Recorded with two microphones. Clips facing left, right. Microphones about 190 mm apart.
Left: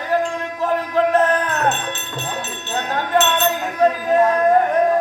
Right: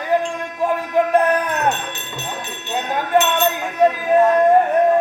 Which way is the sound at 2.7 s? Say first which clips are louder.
Right 1 dB; 10° right (ahead or behind).